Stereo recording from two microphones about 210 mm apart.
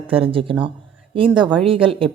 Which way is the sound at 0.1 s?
25° right (ahead or behind).